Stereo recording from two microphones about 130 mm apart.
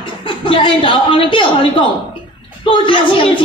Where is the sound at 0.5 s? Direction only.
40° left (ahead or behind).